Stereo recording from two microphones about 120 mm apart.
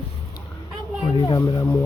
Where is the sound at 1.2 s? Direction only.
30° left (ahead or behind).